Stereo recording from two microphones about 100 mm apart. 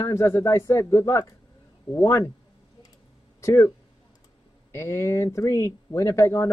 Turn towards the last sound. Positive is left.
turn(degrees=30)  # may be behind; listen again after turning